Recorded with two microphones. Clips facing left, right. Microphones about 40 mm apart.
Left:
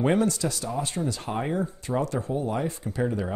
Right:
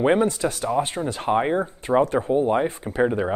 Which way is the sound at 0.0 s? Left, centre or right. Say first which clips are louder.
Right 4 dB; right.